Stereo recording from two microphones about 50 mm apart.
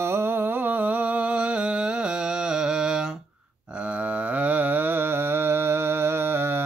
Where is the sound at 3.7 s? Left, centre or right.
Right.